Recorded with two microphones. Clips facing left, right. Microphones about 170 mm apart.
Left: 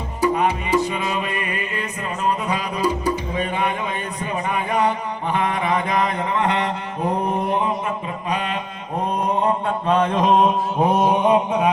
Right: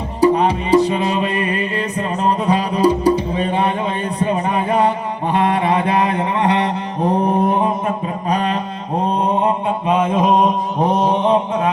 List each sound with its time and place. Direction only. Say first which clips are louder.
0.2 s music: right 6 dB; 35° right (ahead or behind)
4.2 s chant: right 7 dB; 35° right (ahead or behind)
9.1 s mantra: right 2 dB; 20° right (ahead or behind); by 11.7 s 10° left (ahead or behind)